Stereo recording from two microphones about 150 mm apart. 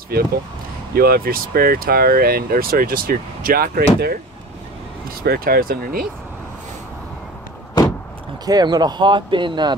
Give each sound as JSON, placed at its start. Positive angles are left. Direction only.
{"t": 0.9, "sound": "speech", "side_deg": -90}
{"t": 5.2, "sound": "speech", "side_deg": -90}
{"t": 8.5, "sound": "speech", "side_deg": -25}